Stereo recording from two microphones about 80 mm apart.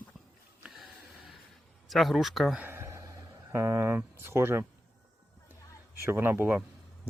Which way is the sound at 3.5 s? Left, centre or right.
Right.